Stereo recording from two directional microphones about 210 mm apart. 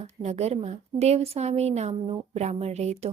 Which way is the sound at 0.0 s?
30° right (ahead or behind).